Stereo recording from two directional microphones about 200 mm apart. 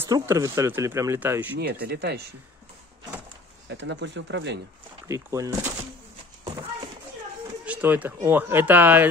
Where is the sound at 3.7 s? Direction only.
65° right (ahead or behind).